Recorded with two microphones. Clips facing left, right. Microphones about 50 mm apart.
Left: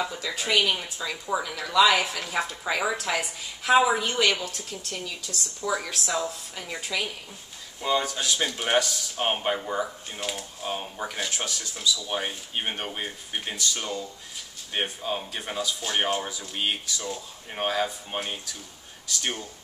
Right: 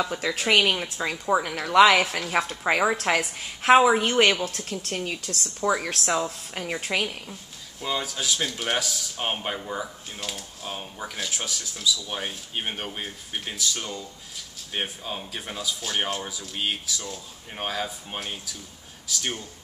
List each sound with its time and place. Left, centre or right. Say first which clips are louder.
0.1 s speech: right 4 dB; right
0.7 s speech: right 4 dB; right
7.8 s speech: left 3 dB; centre